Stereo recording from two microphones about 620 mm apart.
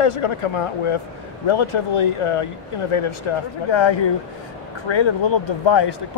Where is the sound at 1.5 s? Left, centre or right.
Left.